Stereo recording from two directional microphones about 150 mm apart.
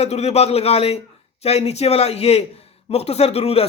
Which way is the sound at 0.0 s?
45° left (ahead or behind).